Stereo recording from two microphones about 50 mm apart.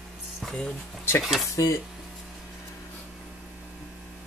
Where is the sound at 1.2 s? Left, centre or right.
Centre.